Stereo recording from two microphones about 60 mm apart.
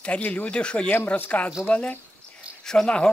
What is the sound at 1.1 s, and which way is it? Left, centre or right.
Speech, left.